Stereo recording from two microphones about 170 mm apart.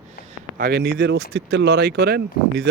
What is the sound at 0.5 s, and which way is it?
Speech, 65° right (ahead or behind).